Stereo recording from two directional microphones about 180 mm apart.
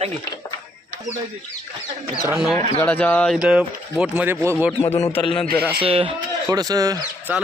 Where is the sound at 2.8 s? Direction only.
10° left (ahead or behind); by 4.5 s 10° right (ahead or behind).